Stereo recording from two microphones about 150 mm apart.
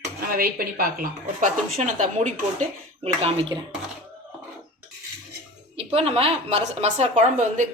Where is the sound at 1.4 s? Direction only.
55° right (ahead or behind).